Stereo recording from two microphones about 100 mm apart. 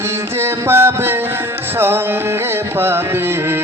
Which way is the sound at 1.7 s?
20° right (ahead or behind).